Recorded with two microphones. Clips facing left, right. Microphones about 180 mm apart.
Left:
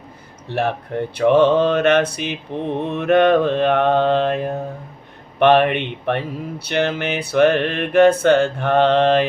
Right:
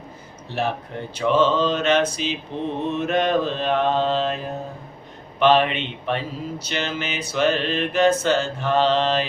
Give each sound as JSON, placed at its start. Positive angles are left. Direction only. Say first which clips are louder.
{"t": 0.4, "sound": "speech", "louder": "left 4 dB", "side_deg": 60}